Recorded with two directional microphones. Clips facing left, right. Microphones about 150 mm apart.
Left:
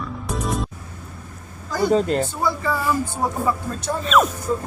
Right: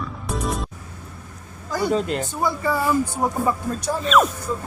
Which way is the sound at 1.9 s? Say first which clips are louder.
Left 5 dB; 40° left (ahead or behind).